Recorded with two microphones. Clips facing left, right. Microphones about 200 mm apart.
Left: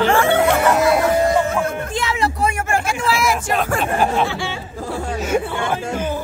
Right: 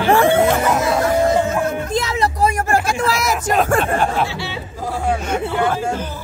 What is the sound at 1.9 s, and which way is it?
Speech, 40° right (ahead or behind).